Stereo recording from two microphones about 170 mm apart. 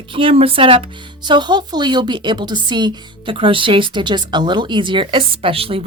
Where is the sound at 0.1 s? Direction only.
30° right (ahead or behind).